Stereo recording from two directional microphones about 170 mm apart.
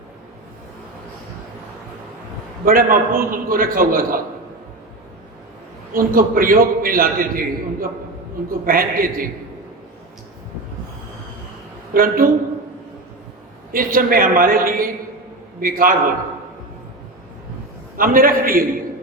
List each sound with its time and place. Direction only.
2.6 s a man's voice: 55° right (ahead or behind)
5.9 s a man's voice: 55° right (ahead or behind)
11.9 s a man's voice: 55° right (ahead or behind)
13.7 s a man's voice: 55° right (ahead or behind)
17.9 s a man's voice: 55° right (ahead or behind)